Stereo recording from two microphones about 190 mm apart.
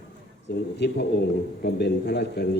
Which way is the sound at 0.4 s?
65° left (ahead or behind).